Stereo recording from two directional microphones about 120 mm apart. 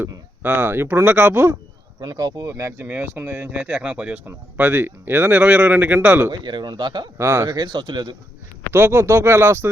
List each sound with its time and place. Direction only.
0.4 s speech: 15° right (ahead or behind)
2.0 s speech: 35° right (ahead or behind); by 6.3 s 15° right (ahead or behind)
6.4 s speech: 40° right (ahead or behind)
7.2 s speech: 25° right (ahead or behind)
7.5 s speech: 40° right (ahead or behind)
8.7 s speech: 20° right (ahead or behind)